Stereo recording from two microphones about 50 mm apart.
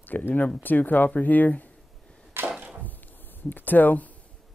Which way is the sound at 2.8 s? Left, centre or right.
Left.